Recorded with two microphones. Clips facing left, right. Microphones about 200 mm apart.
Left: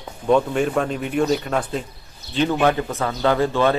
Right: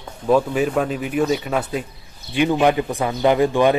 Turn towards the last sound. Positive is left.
turn(degrees=-15)  # may be behind; listen again after turning